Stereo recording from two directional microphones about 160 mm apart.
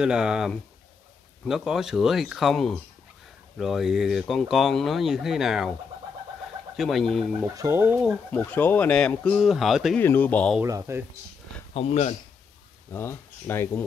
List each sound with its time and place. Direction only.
0.0 s speech: 5° right (ahead or behind)
6.8 s speech: centre (ahead or behind)
7.5 s speech: 20° right (ahead or behind)
8.3 s speech: 10° left (ahead or behind)
9.9 s speech: 10° left (ahead or behind)
10.6 s speech: 20° right (ahead or behind)
11.7 s speech: 40° left (ahead or behind)
12.9 s speech: 15° left (ahead or behind)